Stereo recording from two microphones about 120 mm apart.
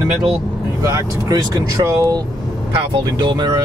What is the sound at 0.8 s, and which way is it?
Speech, 30° right (ahead or behind).